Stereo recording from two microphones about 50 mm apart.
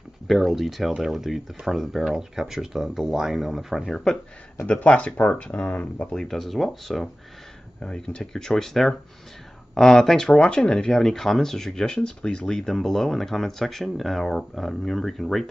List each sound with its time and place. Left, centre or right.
0.3 s speech: centre
3.9 s speech: centre
4.6 s speech: left
6.1 s speech: centre
7.8 s speech: centre